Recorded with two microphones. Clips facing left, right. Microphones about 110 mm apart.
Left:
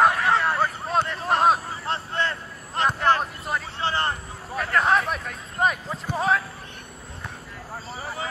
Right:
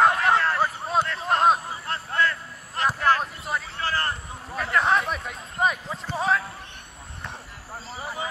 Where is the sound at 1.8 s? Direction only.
25° left (ahead or behind).